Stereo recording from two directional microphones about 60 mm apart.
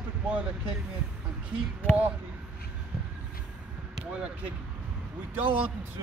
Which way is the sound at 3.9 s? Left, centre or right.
Centre.